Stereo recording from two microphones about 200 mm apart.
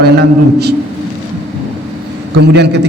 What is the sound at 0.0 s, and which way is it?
Speech, 50° right (ahead or behind).